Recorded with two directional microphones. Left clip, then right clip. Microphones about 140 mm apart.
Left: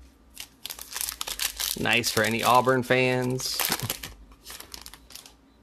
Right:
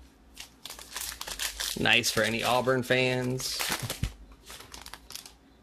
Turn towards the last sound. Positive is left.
turn(degrees=35)  # may be behind; listen again after turning